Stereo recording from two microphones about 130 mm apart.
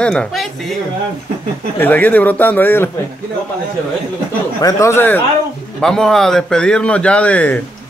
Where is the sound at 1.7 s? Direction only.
15° left (ahead or behind).